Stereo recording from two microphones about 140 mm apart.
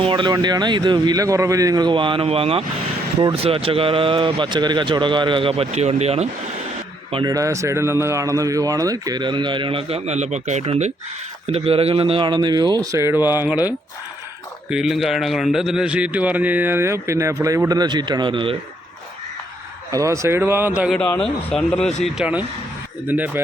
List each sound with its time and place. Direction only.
0.0 s speech: 35° right (ahead or behind)
7.1 s a man's voice: 30° right (ahead or behind); by 13.6 s 15° right (ahead or behind)
14.7 s a man's voice: 5° right (ahead or behind); by 18.5 s 35° right (ahead or behind)
19.9 s a man's voice: 20° right (ahead or behind)
21.2 s a man's voice: 5° left (ahead or behind); by 23.4 s 15° right (ahead or behind)